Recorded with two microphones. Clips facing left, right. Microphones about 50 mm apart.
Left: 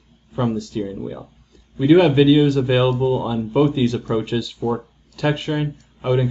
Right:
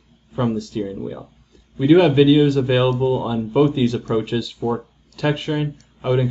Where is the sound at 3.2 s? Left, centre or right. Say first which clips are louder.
Right 1 dB; centre.